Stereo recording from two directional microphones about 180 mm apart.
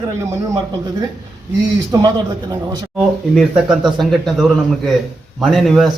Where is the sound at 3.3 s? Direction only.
5° right (ahead or behind).